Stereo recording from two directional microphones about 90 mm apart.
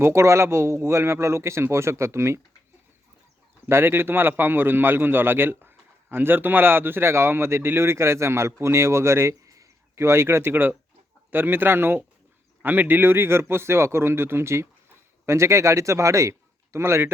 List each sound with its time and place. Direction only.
0.0 s speech: 30° right (ahead or behind)
3.7 s a man's voice: 25° right (ahead or behind)